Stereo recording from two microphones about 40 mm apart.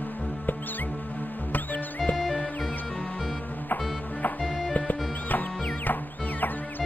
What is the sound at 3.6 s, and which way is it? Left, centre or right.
Music, left.